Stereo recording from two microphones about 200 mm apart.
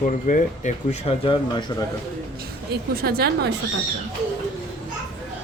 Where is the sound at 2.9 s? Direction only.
50° right (ahead or behind).